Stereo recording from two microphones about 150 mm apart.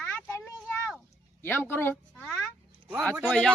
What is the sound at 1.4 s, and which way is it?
Speech, 15° left (ahead or behind).